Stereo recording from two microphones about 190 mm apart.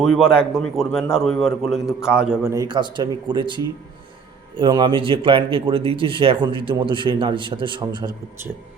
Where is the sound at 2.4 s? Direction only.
15° right (ahead or behind).